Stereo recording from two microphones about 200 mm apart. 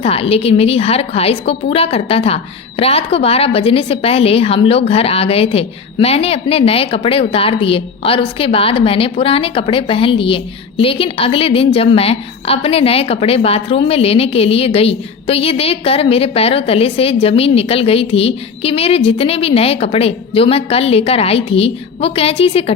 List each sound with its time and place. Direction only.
0.0 s a woman's voice: 30° left (ahead or behind)